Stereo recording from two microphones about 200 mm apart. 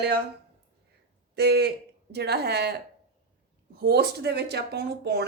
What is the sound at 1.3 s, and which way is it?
A woman's voice, 55° right (ahead or behind).